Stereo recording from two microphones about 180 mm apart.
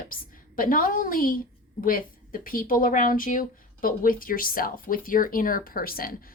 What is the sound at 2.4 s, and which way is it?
Speech, 50° left (ahead or behind).